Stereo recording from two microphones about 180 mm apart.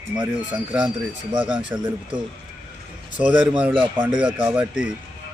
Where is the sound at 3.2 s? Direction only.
5° right (ahead or behind).